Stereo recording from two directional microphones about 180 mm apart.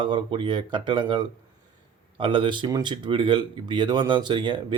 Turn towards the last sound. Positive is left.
turn(degrees=-25)  # may be behind; listen again after turning